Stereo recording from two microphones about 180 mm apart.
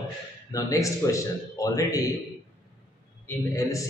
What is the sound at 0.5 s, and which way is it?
A man's voice, 20° left (ahead or behind).